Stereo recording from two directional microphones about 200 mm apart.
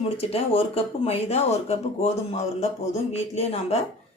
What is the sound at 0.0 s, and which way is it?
Speech, 30° left (ahead or behind).